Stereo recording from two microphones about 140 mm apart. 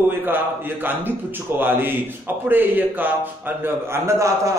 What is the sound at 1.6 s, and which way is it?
A man's voice, 15° right (ahead or behind).